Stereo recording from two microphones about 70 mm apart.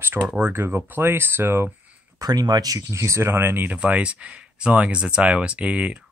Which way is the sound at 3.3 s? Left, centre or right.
Right.